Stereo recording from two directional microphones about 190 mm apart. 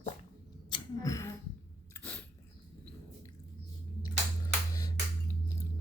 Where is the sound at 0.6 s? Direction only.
20° left (ahead or behind).